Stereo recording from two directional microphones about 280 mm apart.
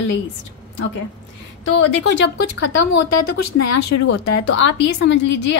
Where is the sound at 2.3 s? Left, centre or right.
Left.